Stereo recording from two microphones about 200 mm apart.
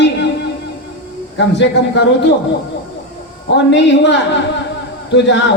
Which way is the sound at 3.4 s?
60° left (ahead or behind).